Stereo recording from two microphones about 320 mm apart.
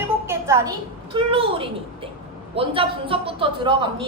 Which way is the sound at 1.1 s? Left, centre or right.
Centre.